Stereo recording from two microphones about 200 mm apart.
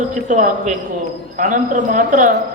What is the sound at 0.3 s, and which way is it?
A man's voice, 35° right (ahead or behind).